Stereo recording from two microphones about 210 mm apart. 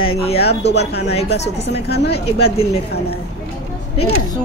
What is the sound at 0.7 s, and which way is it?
A woman's voice, 50° left (ahead or behind).